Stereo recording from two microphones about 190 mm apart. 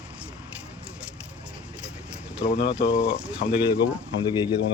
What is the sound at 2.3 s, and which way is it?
Speech, 5° right (ahead or behind).